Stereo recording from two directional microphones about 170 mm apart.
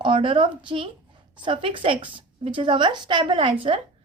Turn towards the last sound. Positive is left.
turn(degrees=-30)  # may be behind; listen again after turning